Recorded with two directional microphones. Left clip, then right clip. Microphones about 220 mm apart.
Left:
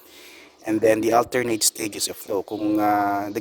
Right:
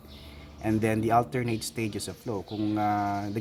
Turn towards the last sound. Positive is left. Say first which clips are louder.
# left 7 dB
turn(degrees=50)  # may be behind; listen again after turning